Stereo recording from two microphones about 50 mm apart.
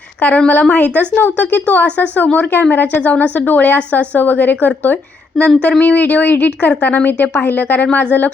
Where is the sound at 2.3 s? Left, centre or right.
Left.